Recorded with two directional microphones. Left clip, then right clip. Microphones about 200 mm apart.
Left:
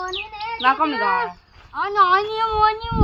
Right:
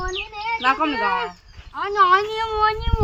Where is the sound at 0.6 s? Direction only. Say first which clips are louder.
Left 2 dB; 5° left (ahead or behind).